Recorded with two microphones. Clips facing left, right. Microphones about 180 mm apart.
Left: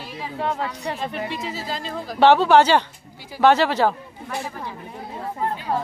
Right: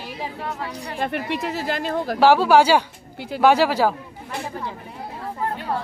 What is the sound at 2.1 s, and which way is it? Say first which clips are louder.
Speech: left 1 dB; 5° right (ahead or behind).